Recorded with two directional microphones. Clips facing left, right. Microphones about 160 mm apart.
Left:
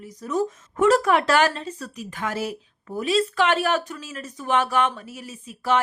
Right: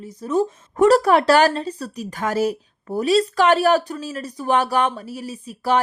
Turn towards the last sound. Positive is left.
turn(degrees=-35)  # may be behind; listen again after turning